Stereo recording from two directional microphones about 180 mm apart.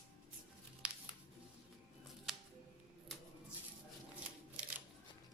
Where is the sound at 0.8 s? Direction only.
5° right (ahead or behind).